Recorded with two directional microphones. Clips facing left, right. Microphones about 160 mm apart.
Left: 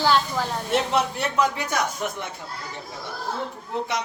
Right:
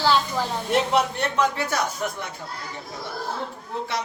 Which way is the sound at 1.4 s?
15° left (ahead or behind).